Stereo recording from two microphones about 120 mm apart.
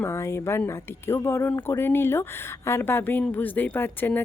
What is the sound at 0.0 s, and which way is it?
A woman's voice, 20° left (ahead or behind).